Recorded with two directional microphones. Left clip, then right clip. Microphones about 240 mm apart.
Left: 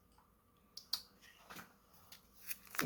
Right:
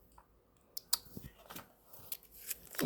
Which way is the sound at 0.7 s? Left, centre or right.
Right.